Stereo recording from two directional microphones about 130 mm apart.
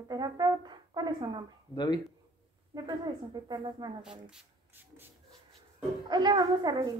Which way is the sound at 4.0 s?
5° right (ahead or behind).